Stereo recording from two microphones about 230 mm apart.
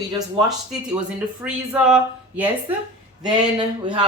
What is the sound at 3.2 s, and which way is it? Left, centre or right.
Speech, centre.